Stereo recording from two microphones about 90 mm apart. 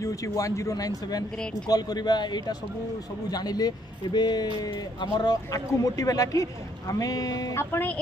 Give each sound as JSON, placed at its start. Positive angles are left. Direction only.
{"t": 0.0, "sound": "speech", "side_deg": 40}
{"t": 7.7, "sound": "speech", "side_deg": 20}